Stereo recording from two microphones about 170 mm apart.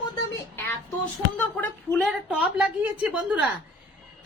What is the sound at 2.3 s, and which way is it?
A woman's voice, 10° right (ahead or behind).